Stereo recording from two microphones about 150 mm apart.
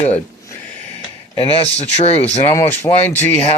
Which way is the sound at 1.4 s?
35° left (ahead or behind).